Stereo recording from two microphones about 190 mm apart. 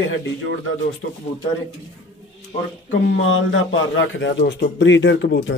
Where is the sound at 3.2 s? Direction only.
90° left.